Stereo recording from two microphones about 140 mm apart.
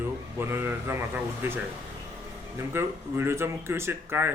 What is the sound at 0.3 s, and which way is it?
Speech, 15° right (ahead or behind).